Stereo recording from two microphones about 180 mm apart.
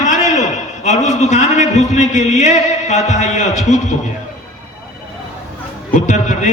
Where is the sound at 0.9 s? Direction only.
40° left (ahead or behind).